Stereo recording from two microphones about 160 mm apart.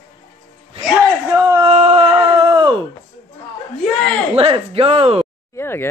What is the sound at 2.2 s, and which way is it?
Groan, 35° right (ahead or behind).